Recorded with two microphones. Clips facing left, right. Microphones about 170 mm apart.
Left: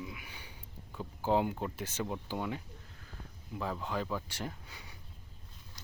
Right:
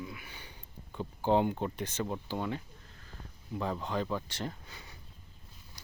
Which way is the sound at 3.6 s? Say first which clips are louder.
Right 2 dB; 5° left (ahead or behind).